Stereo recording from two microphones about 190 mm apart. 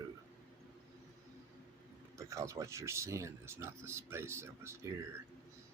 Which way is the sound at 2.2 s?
15° right (ahead or behind).